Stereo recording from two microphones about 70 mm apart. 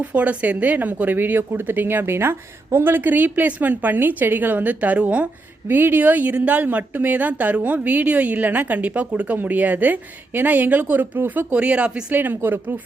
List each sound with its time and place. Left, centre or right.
0.0 s a woman's voice: right
12.1 s a woman's voice: right